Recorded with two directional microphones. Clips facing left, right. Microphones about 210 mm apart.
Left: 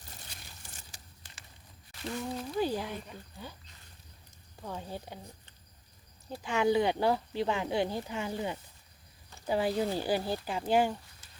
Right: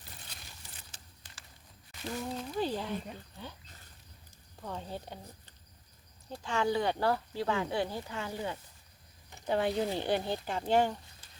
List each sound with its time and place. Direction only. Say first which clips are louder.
0.6 s a sound: left 1 dB; 45° left (ahead or behind)
0.9 s a sound: left 1 dB; 10° left (ahead or behind)
2.0 s speech: left 1 dB; centre (ahead or behind)
4.6 s speech: even; 5° left (ahead or behind)
6.3 s speech: left 4 dB; 15° left (ahead or behind)
9.5 s speech: left 1 dB; centre (ahead or behind)